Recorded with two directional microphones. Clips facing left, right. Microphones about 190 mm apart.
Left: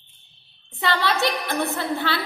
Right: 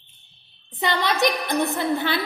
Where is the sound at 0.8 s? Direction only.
15° right (ahead or behind).